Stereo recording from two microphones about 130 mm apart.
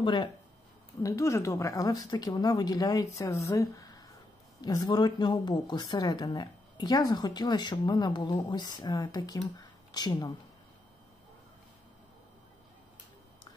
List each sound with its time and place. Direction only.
0.0 s speech: 35° left (ahead or behind)
1.0 s a woman's voice: 25° left (ahead or behind)
9.6 s a sound: 30° left (ahead or behind)